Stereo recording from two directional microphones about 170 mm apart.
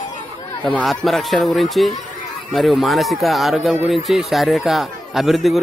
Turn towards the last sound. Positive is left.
turn(degrees=0)  # may be behind; listen again after turning